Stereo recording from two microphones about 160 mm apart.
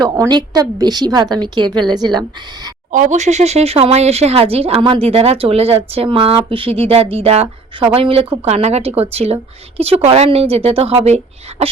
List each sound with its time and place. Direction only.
0.0 s a woman's voice: 25° right (ahead or behind)
2.9 s speech: 50° right (ahead or behind)